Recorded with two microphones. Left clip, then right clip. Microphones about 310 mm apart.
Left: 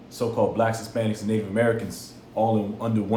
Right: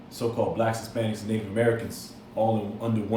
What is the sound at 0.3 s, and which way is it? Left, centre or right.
A man's voice, left.